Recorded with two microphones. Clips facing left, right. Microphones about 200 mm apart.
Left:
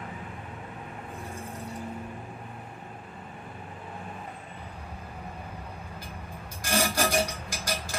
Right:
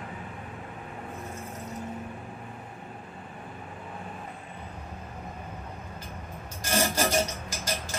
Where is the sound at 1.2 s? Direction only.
30° left (ahead or behind).